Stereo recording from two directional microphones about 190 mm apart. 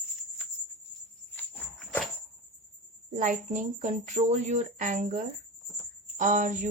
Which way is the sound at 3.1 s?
40° right (ahead or behind).